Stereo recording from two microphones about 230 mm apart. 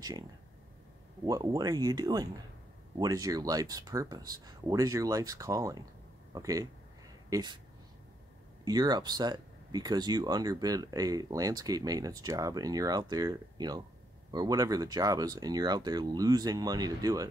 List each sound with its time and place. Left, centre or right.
1.2 s speech: centre
8.6 s speech: centre